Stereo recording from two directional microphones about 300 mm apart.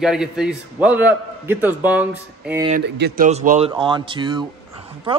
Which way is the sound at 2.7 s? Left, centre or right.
Right.